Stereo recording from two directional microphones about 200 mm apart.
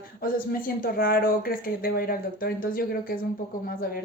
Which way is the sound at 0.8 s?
45° left (ahead or behind).